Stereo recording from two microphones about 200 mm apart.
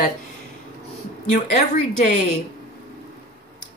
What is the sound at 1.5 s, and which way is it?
Speech, 40° left (ahead or behind).